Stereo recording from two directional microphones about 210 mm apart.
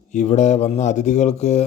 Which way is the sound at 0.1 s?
35° left (ahead or behind).